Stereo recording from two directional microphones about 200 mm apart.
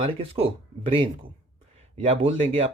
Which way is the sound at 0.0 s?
30° right (ahead or behind).